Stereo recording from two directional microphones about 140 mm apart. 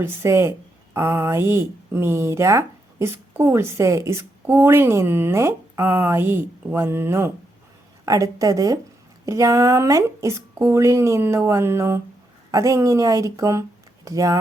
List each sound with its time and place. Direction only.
0.0 s speech: 15° right (ahead or behind)